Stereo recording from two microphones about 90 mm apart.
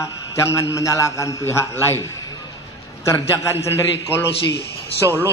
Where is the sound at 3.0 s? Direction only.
30° left (ahead or behind).